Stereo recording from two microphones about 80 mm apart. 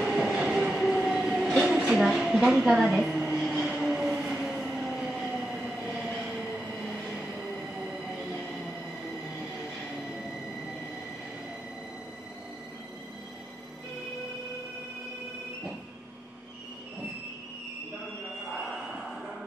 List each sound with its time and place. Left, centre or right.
0.0 s train: centre
3.2 s vehicle: centre